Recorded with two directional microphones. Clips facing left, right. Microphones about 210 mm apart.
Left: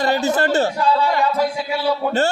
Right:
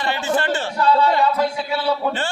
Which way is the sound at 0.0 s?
40° left (ahead or behind).